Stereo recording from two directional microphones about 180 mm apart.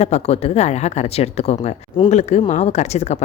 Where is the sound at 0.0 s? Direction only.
35° left (ahead or behind).